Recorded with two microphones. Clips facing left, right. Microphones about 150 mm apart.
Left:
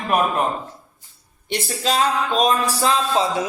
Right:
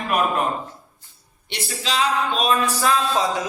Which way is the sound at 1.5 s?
45° left (ahead or behind).